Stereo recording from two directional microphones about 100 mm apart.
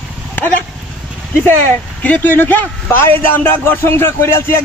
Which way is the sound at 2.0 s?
15° left (ahead or behind).